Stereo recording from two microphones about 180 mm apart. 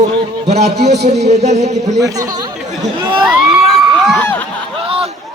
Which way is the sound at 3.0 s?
25° right (ahead or behind).